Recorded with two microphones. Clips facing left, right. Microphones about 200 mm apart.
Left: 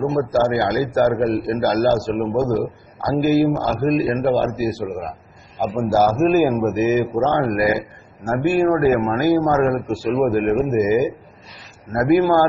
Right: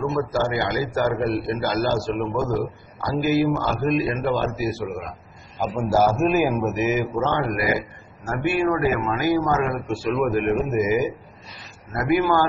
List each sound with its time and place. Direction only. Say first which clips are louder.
0.0 s a man's voice: left 5 dB; 45° left (ahead or behind)